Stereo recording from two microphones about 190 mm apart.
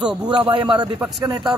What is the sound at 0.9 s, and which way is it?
Speech, 5° right (ahead or behind).